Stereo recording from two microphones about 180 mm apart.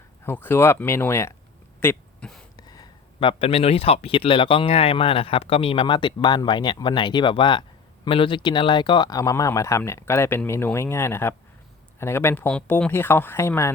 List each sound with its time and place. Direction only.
0.3 s speech: 10° left (ahead or behind)
1.8 s a sound: 10° left (ahead or behind)
2.6 s speech: 20° left (ahead or behind)